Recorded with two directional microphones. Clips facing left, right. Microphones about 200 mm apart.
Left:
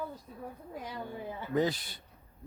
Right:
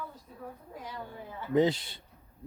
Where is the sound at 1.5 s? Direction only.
25° right (ahead or behind).